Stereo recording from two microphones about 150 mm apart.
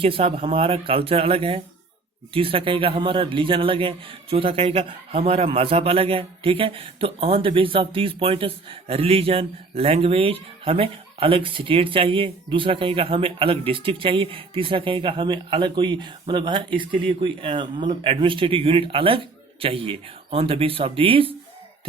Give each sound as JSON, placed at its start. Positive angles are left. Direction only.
{"t": 0.0, "sound": "a man's voice", "side_deg": -40}